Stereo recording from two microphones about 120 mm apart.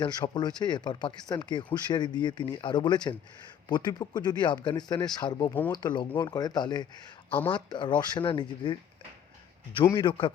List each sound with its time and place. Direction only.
0.0 s speech: 40° left (ahead or behind)
5.4 s speech: 15° left (ahead or behind)
5.8 s speech: 40° left (ahead or behind)
9.9 s a man's voice: 40° left (ahead or behind)